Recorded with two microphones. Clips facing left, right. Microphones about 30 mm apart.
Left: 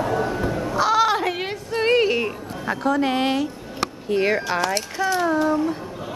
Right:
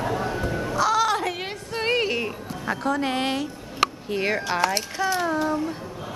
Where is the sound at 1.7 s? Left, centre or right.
Centre.